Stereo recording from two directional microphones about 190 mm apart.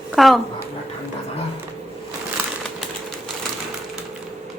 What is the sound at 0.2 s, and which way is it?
Speech, centre (ahead or behind).